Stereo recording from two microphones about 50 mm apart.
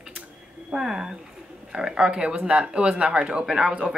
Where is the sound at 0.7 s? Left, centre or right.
Centre.